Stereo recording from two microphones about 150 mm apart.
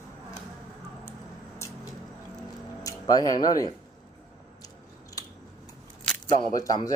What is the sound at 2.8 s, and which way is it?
Speech, 25° left (ahead or behind).